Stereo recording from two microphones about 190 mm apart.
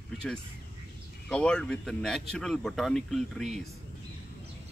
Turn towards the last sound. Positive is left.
turn(degrees=0)  # may be behind; listen again after turning